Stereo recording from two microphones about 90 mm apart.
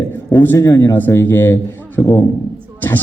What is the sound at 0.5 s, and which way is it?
A man's voice, 35° left (ahead or behind).